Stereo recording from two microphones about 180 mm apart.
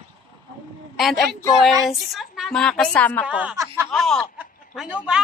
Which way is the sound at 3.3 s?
5° right (ahead or behind).